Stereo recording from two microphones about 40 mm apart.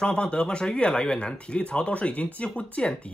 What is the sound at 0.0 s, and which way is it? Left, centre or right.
Speech, left.